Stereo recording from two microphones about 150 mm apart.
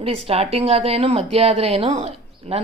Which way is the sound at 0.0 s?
40° right (ahead or behind).